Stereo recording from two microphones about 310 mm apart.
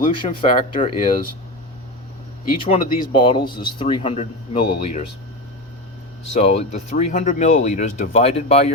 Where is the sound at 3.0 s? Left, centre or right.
Centre.